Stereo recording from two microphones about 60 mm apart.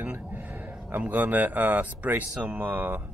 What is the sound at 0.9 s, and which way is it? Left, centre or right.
Speech, right.